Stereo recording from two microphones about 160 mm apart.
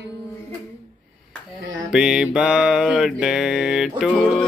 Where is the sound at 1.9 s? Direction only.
5° right (ahead or behind).